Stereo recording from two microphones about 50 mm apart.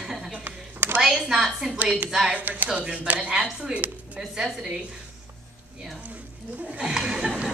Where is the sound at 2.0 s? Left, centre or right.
Centre.